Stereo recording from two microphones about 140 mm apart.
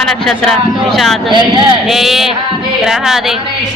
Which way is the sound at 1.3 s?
35° right (ahead or behind).